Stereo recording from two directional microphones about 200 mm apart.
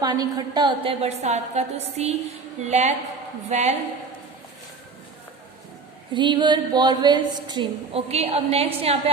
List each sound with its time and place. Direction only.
0.0 s a woman's voice: 20° right (ahead or behind)
6.1 s a woman's voice: 25° right (ahead or behind)